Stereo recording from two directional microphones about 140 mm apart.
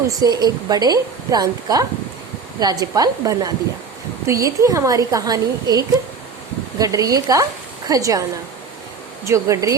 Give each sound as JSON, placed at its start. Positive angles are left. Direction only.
{"t": 0.2, "sound": "speech", "side_deg": -30}
{"t": 9.2, "sound": "speech", "side_deg": -20}